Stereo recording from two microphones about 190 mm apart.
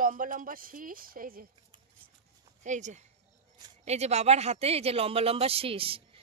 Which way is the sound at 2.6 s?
40° right (ahead or behind).